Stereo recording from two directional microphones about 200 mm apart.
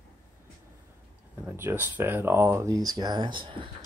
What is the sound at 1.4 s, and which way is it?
Speech, 10° right (ahead or behind).